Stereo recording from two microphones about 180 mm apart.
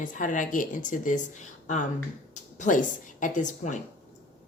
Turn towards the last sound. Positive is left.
turn(degrees=45)  # may be behind; listen again after turning